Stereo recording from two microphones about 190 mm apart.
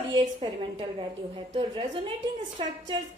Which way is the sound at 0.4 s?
25° right (ahead or behind).